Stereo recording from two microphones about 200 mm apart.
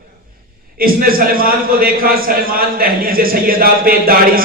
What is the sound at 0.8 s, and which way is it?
A man's voice, 45° right (ahead or behind).